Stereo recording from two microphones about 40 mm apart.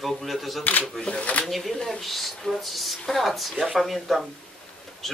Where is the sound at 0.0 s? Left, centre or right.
Centre.